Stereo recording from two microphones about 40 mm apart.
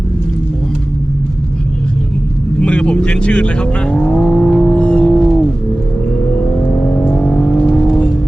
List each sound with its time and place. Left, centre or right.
2.6 s vehicle: left
6.1 s vehicle: left
7.1 s vehicle: centre